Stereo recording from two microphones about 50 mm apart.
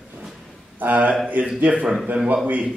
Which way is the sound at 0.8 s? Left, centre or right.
Right.